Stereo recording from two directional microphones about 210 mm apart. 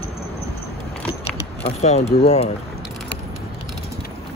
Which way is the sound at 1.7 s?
30° left (ahead or behind).